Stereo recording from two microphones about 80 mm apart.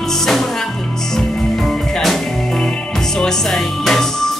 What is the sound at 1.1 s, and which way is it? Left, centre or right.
Music, centre.